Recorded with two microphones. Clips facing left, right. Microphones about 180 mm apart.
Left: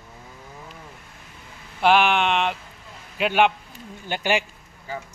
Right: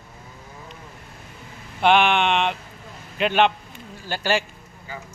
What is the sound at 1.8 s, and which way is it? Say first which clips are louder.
Speech: right 1 dB; 5° left (ahead or behind).